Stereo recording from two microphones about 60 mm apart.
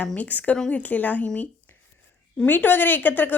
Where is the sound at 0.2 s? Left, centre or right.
Left.